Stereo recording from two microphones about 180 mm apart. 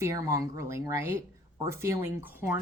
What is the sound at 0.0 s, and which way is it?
Speech, 15° right (ahead or behind).